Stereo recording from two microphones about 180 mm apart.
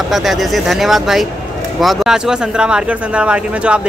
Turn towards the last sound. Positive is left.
turn(degrees=-5)  # may be behind; listen again after turning